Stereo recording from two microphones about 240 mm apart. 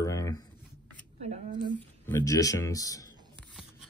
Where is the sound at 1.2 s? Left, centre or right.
Right.